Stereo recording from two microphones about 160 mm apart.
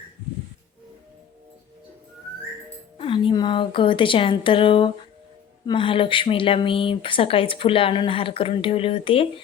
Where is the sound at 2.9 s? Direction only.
30° left (ahead or behind).